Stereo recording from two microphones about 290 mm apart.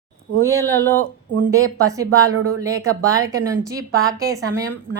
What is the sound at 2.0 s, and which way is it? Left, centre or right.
Speech, right.